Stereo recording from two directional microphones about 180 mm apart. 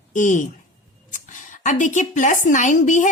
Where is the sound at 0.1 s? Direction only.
45° left (ahead or behind).